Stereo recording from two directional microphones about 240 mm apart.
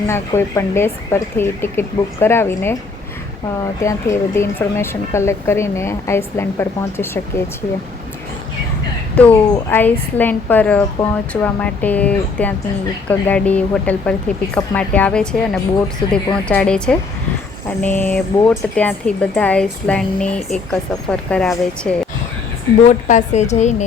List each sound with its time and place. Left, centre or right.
0.1 s a woman's voice: centre
3.8 s a woman's voice: centre
9.1 s a woman's voice: centre
22.9 s a woman's voice: left